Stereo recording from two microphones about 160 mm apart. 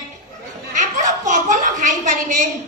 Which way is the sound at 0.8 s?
50° right (ahead or behind).